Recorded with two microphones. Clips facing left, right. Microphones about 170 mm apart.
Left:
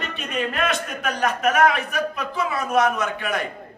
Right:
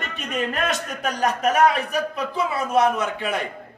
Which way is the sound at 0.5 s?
40° right (ahead or behind).